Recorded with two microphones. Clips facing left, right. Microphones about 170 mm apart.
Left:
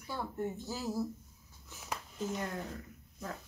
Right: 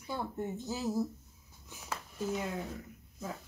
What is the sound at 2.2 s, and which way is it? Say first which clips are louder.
Speech: right 2 dB; 5° right (ahead or behind).